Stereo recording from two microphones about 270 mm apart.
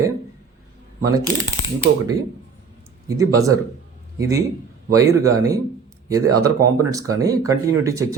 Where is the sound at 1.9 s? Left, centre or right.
Right.